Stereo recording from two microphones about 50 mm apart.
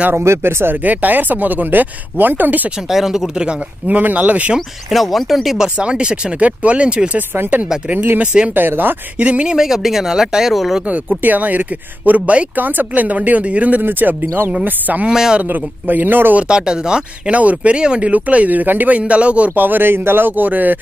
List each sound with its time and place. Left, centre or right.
0.2 s speech: right
0.8 s speech: right
2.9 s speech: centre
3.8 s speech: right
4.6 s speech: centre
5.8 s speech: right
7.2 s speech: right
9.2 s speech: right; by 10.8 s centre
11.2 s speech: right
12.5 s speech: right
15.0 s speech: centre
15.4 s speech: right
16.3 s speech: centre; by 20.8 s right